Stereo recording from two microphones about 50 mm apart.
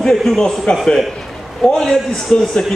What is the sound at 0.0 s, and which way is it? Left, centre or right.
Speech, centre.